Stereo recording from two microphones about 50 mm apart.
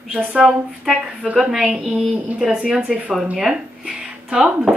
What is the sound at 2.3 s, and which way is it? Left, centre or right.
Speech, centre.